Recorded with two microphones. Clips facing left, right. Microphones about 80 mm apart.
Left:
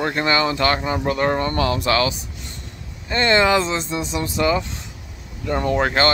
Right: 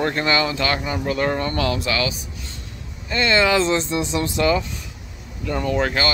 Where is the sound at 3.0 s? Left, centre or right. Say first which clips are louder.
Left 2 dB; left.